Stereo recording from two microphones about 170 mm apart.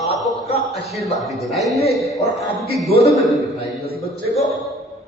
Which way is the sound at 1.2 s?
Centre (ahead or behind).